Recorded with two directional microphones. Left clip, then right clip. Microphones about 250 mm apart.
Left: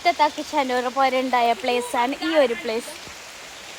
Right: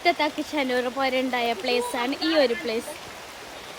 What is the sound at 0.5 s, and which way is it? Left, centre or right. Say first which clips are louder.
Speech: left 3 dB; centre.